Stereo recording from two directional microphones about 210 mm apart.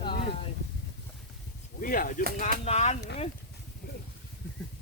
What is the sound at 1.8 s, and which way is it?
Speech, 40° left (ahead or behind).